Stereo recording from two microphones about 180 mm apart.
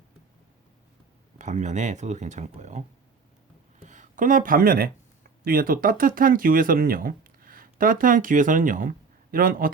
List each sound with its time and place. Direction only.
1.4 s speech: 40° right (ahead or behind)
3.8 s speech: 45° right (ahead or behind)